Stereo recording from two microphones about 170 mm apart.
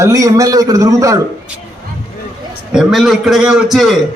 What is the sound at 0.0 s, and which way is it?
A man's voice, 20° right (ahead or behind).